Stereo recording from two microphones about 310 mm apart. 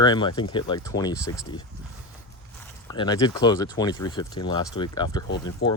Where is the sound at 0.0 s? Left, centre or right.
Centre.